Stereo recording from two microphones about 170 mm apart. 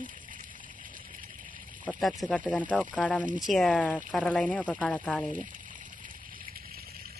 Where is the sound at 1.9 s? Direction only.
Centre (ahead or behind).